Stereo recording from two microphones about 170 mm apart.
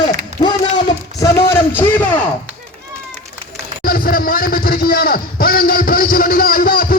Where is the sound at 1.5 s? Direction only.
10° left (ahead or behind).